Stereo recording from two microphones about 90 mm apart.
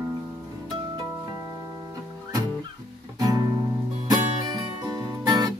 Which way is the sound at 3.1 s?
45° right (ahead or behind).